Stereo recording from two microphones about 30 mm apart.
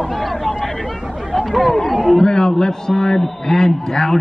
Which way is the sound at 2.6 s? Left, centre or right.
Centre.